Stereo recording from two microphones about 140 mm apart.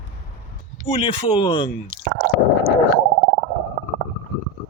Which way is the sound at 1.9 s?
80° right.